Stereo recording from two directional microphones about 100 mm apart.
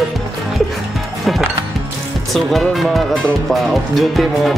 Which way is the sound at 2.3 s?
Centre (ahead or behind).